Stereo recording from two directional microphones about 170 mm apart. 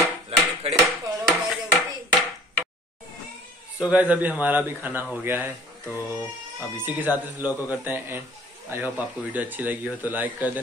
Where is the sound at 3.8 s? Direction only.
10° right (ahead or behind).